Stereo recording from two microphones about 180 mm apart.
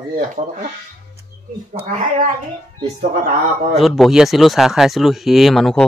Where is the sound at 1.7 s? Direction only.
40° right (ahead or behind).